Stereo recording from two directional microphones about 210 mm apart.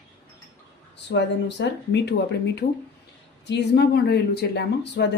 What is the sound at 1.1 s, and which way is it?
Speech, 55° left (ahead or behind).